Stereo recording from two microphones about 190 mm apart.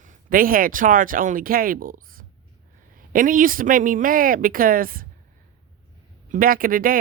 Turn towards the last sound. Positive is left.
turn(degrees=-50)  # may be behind; listen again after turning